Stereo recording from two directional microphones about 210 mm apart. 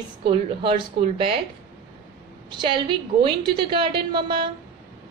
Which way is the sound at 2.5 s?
20° right (ahead or behind).